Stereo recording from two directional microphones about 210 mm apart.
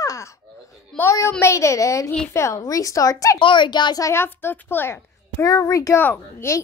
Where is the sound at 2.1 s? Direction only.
10° left (ahead or behind).